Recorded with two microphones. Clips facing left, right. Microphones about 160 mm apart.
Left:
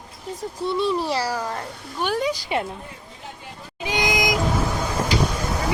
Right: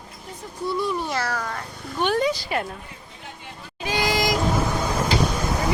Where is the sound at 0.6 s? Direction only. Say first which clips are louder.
Left 3 dB; 25° left (ahead or behind).